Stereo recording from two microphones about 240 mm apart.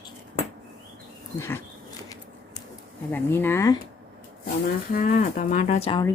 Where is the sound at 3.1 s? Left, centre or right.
Centre.